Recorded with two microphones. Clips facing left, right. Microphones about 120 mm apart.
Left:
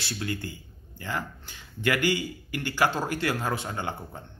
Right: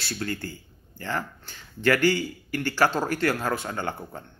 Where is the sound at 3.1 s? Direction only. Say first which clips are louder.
Right 3 dB; 45° right (ahead or behind).